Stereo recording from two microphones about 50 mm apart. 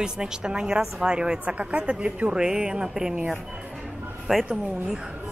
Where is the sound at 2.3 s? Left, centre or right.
Centre.